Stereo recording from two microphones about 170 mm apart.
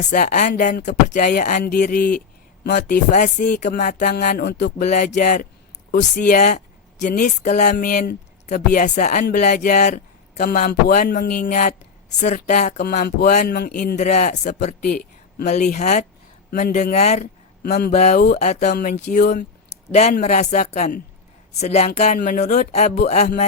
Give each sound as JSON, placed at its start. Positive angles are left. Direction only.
{"t": 0.1, "sound": "speech", "side_deg": 50}
{"t": 1.8, "sound": "speech", "side_deg": 60}
{"t": 4.9, "sound": "speech", "side_deg": 45}
{"t": 12.8, "sound": "speech", "side_deg": 65}
{"t": 13.7, "sound": "speech", "side_deg": 50}
{"t": 16.5, "sound": "a man's voice", "side_deg": 60}
{"t": 16.9, "sound": "speech", "side_deg": 40}
{"t": 17.6, "sound": "speech", "side_deg": 65}
{"t": 17.9, "sound": "speech", "side_deg": 45}
{"t": 18.7, "sound": "speech", "side_deg": 65}
{"t": 19.9, "sound": "speech", "side_deg": 40}